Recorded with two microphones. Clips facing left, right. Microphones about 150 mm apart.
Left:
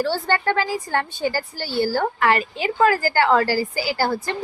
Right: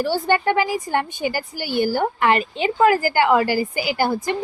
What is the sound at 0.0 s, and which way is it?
A woman's voice, 15° right (ahead or behind).